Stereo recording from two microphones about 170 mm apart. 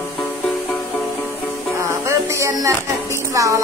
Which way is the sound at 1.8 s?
15° right (ahead or behind).